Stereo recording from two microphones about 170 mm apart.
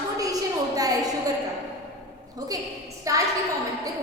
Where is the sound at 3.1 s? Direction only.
20° right (ahead or behind).